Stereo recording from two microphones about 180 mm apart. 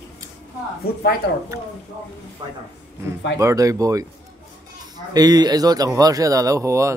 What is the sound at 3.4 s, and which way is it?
Speech, 20° right (ahead or behind).